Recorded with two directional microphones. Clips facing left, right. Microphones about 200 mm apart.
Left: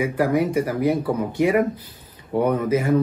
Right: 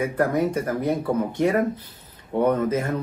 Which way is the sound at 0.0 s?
10° left (ahead or behind).